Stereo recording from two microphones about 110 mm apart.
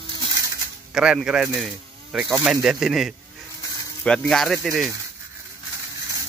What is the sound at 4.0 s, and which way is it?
Speech, 10° left (ahead or behind).